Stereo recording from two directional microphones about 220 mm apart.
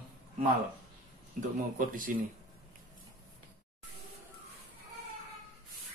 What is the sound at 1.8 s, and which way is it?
Speech, 40° right (ahead or behind).